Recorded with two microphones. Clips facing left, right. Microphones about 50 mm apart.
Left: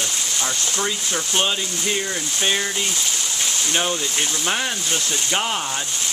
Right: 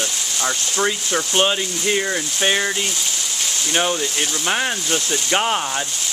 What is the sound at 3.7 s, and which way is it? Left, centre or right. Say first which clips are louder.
Speech: right 4 dB; centre.